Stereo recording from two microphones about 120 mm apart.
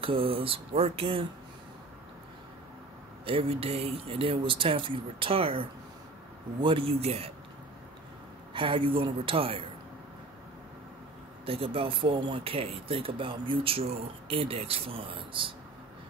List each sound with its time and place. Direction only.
0.0 s speech: 50° right (ahead or behind)
3.3 s speech: 50° right (ahead or behind)
8.5 s speech: 50° right (ahead or behind)
11.4 s speech: 50° right (ahead or behind)